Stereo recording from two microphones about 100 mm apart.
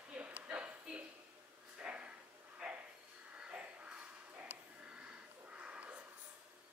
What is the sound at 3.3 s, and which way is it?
Snort, 10° right (ahead or behind).